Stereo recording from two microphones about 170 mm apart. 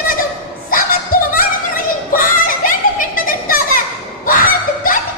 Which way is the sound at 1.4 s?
55° left (ahead or behind).